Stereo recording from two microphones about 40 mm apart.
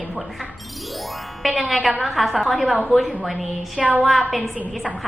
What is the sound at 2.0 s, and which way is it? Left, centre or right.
A woman's voice, centre.